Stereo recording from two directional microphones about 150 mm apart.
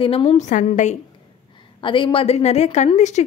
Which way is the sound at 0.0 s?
40° left (ahead or behind).